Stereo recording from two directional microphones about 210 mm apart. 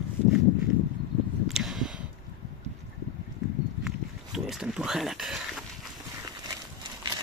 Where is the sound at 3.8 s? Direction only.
Centre (ahead or behind).